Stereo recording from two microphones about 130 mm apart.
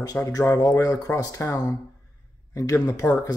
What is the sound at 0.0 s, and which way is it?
Speech, 30° left (ahead or behind).